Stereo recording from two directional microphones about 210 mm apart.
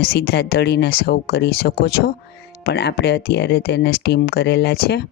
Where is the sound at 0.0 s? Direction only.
50° left (ahead or behind).